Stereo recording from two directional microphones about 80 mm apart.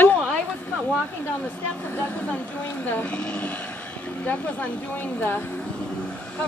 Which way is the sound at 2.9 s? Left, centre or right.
Left.